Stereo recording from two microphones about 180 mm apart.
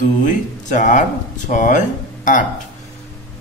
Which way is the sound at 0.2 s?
45° left (ahead or behind).